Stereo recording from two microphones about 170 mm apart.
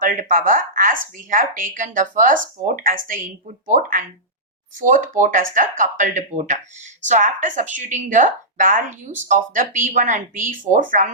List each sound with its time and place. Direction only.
0.0 s speech: 50° right (ahead or behind)